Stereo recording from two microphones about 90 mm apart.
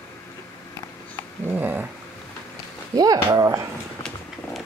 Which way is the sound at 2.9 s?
45° right (ahead or behind).